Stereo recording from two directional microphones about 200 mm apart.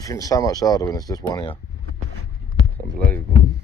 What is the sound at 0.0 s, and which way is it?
Speech, 15° left (ahead or behind).